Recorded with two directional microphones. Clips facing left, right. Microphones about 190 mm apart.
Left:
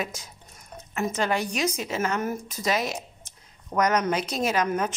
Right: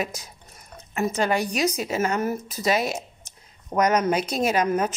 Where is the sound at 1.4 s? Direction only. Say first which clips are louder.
Right 3 dB; 35° right (ahead or behind).